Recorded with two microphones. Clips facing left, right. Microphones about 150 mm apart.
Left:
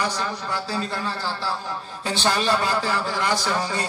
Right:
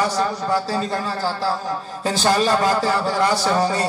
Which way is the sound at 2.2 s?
40° right (ahead or behind).